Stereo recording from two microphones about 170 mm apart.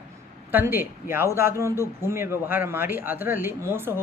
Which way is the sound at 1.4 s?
15° right (ahead or behind).